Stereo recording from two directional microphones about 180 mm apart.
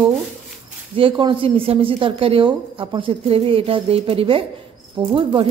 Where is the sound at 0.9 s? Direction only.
30° right (ahead or behind).